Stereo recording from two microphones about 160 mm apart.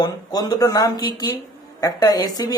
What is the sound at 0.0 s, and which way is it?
Speech, 25° left (ahead or behind).